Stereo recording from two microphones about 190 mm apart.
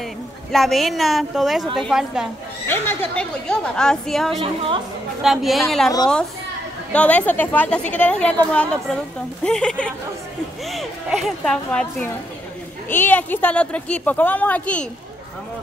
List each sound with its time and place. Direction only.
0.5 s a woman's voice: centre (ahead or behind)
2.7 s a woman's voice: 10° left (ahead or behind)